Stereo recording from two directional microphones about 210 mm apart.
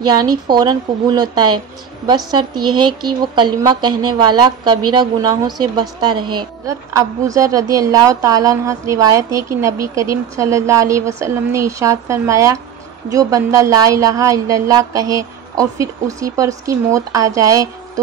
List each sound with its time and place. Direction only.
0.0 s a woman's voice: 20° right (ahead or behind)